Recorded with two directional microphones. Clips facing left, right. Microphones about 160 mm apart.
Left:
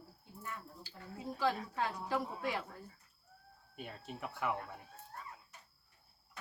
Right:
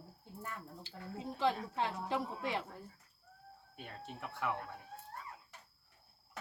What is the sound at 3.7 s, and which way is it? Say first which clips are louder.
Speech: left 2 dB; 5° left (ahead or behind).